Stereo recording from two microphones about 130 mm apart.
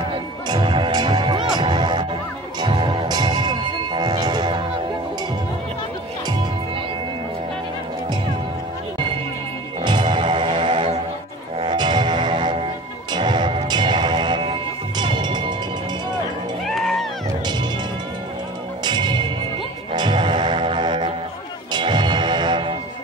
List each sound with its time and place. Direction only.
0.5 s music: 35° right (ahead or behind)
9.8 s music: 40° right (ahead or behind)
16.6 s music: centre (ahead or behind)
18.9 s music: 35° right (ahead or behind)